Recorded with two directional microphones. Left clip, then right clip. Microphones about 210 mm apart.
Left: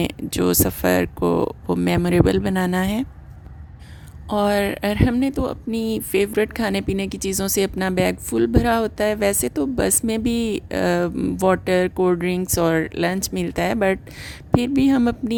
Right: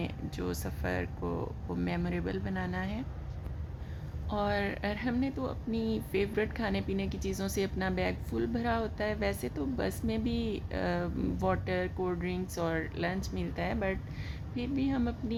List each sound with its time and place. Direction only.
0.0 s speech: 50° left (ahead or behind)
4.3 s speech: 50° left (ahead or behind)